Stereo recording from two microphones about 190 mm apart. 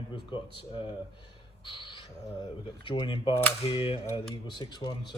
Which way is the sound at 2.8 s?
25° left (ahead or behind).